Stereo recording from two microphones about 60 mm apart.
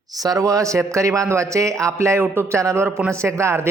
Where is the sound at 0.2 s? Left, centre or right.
Right.